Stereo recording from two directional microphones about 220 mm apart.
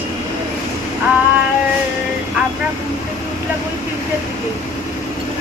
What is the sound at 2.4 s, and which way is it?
Vehicle, 5° right (ahead or behind).